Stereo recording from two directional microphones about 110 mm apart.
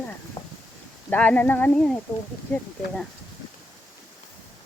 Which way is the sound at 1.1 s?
15° left (ahead or behind).